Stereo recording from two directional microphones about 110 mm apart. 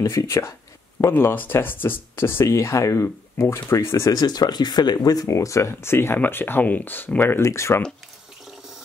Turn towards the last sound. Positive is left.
turn(degrees=25)  # may be behind; listen again after turning